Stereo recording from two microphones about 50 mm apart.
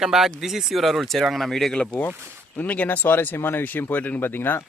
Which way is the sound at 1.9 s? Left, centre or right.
Left.